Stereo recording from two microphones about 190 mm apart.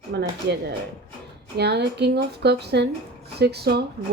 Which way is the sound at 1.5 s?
60° right (ahead or behind).